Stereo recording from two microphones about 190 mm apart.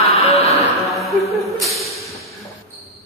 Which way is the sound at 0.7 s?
Centre (ahead or behind).